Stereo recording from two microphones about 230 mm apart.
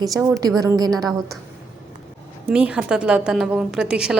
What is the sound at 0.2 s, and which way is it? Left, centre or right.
Speech, centre.